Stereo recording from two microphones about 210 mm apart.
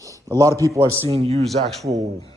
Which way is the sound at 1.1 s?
30° right (ahead or behind).